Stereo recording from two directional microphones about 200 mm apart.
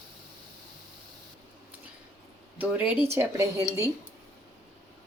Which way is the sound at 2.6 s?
10° right (ahead or behind).